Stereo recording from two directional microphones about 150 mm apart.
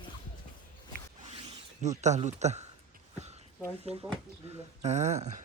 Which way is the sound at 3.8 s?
45° right (ahead or behind).